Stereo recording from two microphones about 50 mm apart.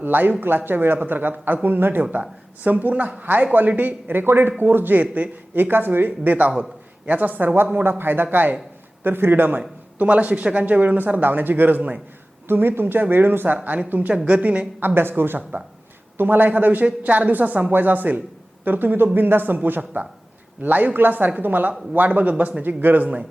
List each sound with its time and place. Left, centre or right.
0.0 s a man's voice: right
2.6 s a man's voice: right
6.1 s a man's voice: right
9.6 s a man's voice: right
12.5 s a man's voice: right
14.3 s a woman's voice: right
14.8 s a man's voice: right